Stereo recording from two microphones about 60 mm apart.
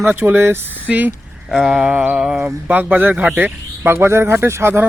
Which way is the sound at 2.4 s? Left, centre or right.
Right.